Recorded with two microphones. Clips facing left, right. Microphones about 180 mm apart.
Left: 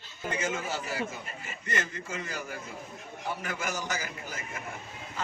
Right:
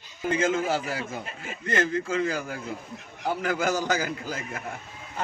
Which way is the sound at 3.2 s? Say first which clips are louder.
Right 9 dB; 65° right (ahead or behind).